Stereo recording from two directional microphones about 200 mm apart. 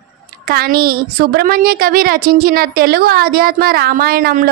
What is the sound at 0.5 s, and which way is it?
A woman's voice, 50° right (ahead or behind).